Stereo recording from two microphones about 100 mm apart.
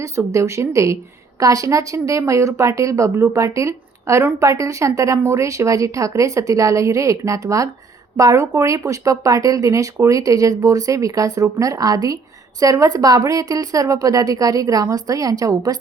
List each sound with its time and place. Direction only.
0.0 s speech: 30° right (ahead or behind)